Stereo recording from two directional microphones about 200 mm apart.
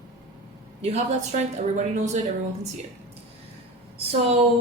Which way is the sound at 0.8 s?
35° right (ahead or behind).